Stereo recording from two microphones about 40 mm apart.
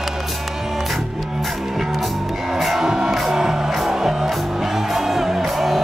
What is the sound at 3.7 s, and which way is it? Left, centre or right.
Music, centre.